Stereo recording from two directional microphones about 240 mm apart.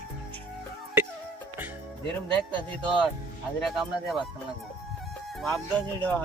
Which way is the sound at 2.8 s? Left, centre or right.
Centre.